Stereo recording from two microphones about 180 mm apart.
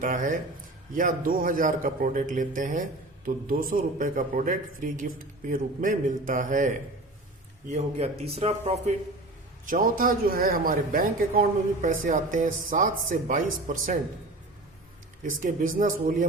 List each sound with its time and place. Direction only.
0.0 s speech: 45° right (ahead or behind)
9.6 s speech: 50° right (ahead or behind)
15.4 s speech: 45° right (ahead or behind)